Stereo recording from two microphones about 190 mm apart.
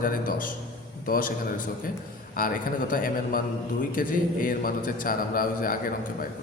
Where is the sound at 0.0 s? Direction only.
45° left (ahead or behind).